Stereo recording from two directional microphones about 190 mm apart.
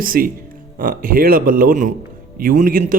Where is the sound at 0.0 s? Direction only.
50° right (ahead or behind).